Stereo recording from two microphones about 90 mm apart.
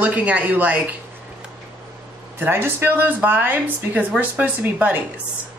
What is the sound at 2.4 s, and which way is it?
A woman's voice, 25° right (ahead or behind).